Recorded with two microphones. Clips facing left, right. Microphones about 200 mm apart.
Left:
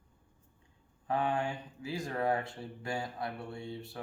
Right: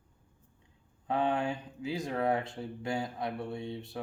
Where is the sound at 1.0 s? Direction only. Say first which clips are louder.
Right 2 dB; 20° right (ahead or behind).